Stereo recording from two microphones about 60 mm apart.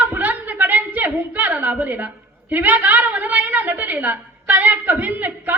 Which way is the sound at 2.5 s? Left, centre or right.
Right.